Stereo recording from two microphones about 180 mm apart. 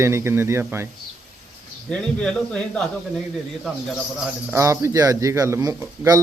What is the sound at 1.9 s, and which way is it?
A man's voice, 5° left (ahead or behind).